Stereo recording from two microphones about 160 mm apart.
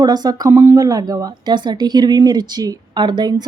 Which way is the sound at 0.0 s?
25° right (ahead or behind).